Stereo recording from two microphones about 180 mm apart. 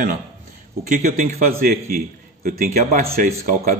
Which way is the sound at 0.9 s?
40° right (ahead or behind).